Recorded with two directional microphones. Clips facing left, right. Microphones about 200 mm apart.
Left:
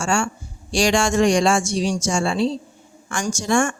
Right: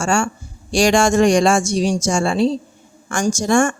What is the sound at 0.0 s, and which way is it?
A woman's voice, 45° right (ahead or behind).